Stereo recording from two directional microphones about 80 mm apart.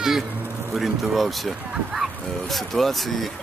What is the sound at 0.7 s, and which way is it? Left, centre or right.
Speech, centre.